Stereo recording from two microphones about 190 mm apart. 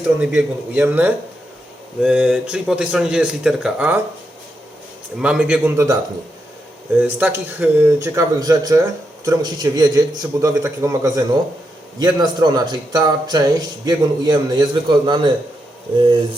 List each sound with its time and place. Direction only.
0.2 s speech: 5° right (ahead or behind)
5.2 s speech: 5° right (ahead or behind)
7.0 s a man's voice: 10° right (ahead or behind); by 15.3 s 25° right (ahead or behind)